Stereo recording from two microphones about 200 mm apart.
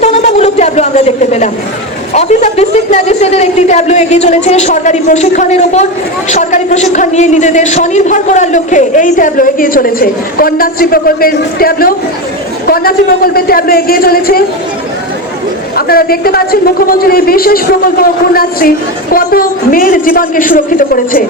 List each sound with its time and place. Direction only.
0.0 s a sound: 35° left (ahead or behind)
2.1 s a man's voice: 35° left (ahead or behind)
15.7 s a man's voice: 50° left (ahead or behind)
19.1 s a man's voice: 45° left (ahead or behind)